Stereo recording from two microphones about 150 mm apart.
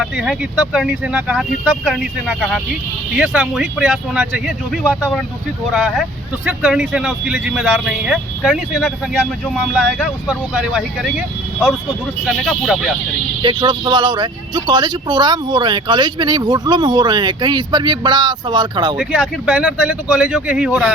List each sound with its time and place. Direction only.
0.0 s speech: 5° right (ahead or behind)
4.2 s speech: 15° right (ahead or behind)
5.7 s speech: centre (ahead or behind)
12.2 s speech: centre (ahead or behind)
13.4 s speech: 30° right (ahead or behind)
19.5 s speech: 10° right (ahead or behind)